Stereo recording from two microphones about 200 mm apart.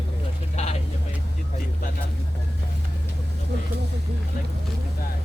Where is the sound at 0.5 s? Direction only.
30° left (ahead or behind).